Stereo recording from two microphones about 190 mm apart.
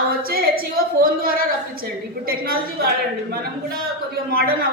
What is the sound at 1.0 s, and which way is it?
A woman's voice, 50° right (ahead or behind).